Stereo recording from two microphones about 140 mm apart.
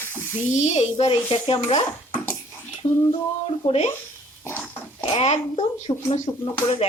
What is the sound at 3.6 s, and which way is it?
Speech, 50° left (ahead or behind).